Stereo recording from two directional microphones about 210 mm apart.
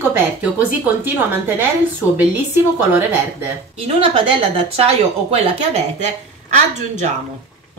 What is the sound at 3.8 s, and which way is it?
Speech, 25° right (ahead or behind).